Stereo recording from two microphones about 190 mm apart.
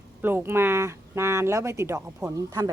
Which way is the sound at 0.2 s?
10° right (ahead or behind).